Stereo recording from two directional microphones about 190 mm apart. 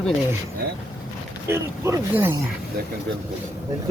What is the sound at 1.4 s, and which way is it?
Speech, 15° right (ahead or behind).